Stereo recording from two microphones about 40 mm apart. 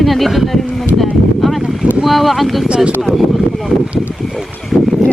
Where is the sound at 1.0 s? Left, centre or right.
Centre.